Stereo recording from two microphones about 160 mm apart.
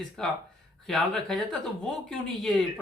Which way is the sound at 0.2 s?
5° left (ahead or behind).